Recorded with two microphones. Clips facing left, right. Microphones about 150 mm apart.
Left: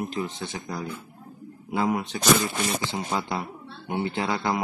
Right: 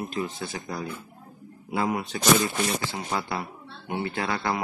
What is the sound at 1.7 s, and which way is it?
Speech, 20° left (ahead or behind).